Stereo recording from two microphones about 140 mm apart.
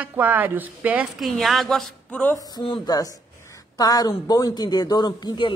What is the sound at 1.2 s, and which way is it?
Speech, centre (ahead or behind).